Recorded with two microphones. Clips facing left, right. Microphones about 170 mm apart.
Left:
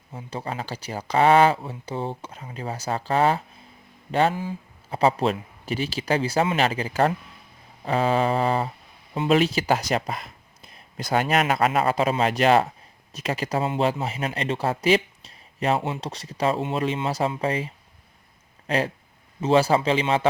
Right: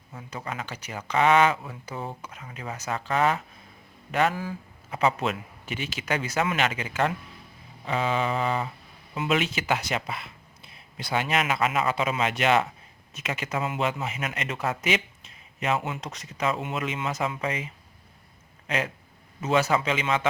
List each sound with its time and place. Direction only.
0.1 s speech: 30° left (ahead or behind)
18.7 s speech: 35° left (ahead or behind)